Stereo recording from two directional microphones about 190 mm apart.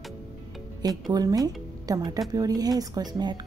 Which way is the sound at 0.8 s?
20° right (ahead or behind).